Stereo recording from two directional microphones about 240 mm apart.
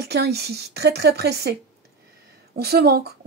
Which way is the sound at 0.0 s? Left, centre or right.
Right.